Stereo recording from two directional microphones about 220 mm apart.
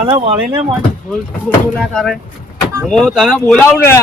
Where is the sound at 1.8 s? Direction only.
Centre (ahead or behind).